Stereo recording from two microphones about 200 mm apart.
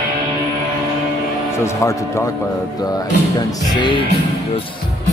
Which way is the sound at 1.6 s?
15° left (ahead or behind).